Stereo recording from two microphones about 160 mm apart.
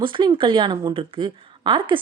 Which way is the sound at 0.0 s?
30° right (ahead or behind).